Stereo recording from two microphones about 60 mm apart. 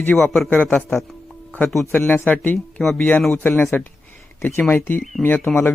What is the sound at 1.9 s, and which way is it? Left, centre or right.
Speech, left.